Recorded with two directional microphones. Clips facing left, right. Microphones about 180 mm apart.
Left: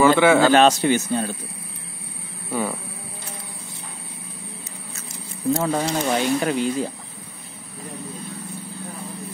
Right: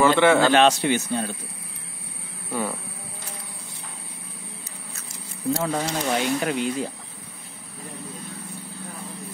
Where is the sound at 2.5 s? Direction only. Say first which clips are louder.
Left 2 dB; 10° left (ahead or behind).